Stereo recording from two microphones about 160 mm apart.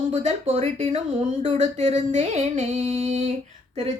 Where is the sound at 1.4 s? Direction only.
40° right (ahead or behind).